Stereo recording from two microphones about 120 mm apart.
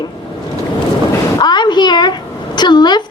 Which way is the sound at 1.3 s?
35° left (ahead or behind).